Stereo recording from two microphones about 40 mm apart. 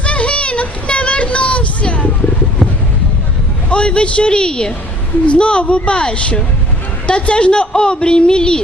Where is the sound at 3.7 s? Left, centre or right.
Left.